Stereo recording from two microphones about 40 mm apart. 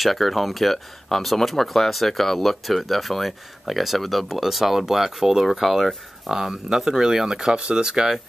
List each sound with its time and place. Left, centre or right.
0.0 s speech: centre